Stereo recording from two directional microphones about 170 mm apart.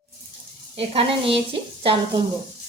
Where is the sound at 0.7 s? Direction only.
35° right (ahead or behind).